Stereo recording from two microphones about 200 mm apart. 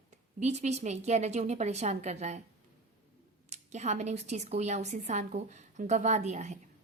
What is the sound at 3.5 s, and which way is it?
A woman's voice, 35° right (ahead or behind).